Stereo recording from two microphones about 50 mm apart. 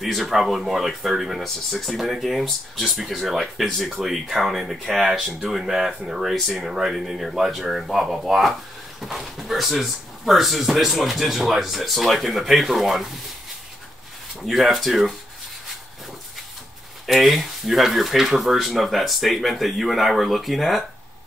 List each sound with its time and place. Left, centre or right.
0.0 s speech: centre
6.6 s speech: centre
14.4 s speech: centre
17.0 s speech: centre